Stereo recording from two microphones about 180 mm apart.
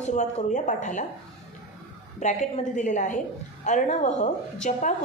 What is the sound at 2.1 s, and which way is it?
Speech, 40° left (ahead or behind).